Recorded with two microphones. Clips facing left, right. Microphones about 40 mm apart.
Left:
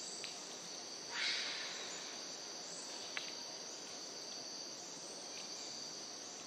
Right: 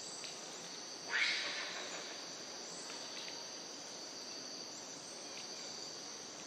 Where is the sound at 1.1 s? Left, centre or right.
Right.